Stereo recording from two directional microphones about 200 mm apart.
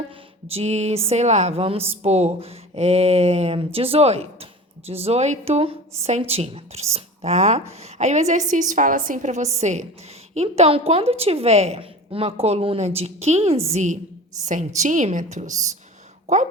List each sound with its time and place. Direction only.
0.5 s a woman's voice: 35° right (ahead or behind)